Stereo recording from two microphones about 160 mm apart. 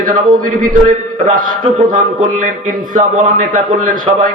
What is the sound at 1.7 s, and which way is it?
A man's voice, 55° right (ahead or behind).